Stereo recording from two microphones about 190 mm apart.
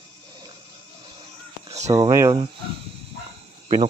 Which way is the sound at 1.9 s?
20° right (ahead or behind).